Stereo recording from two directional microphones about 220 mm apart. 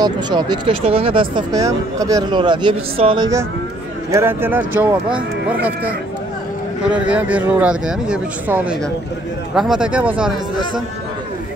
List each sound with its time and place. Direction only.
0.0 s speech: 20° right (ahead or behind)